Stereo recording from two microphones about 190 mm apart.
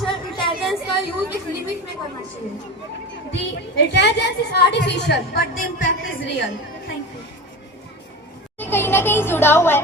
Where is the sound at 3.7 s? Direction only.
65° left (ahead or behind).